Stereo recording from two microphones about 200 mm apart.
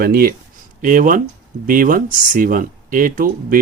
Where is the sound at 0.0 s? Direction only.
50° right (ahead or behind).